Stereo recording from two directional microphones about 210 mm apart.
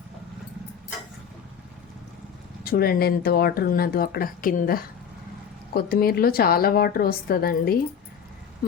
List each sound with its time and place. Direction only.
2.6 s speech: 45° left (ahead or behind)